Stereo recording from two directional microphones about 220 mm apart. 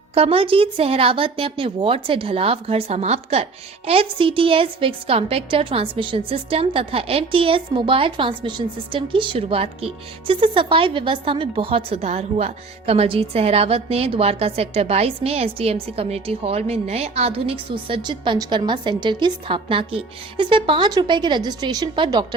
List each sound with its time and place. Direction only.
0.1 s a woman's voice: 25° right (ahead or behind)